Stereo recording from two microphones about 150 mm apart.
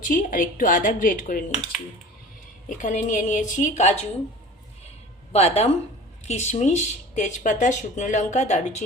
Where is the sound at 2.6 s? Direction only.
60° left (ahead or behind).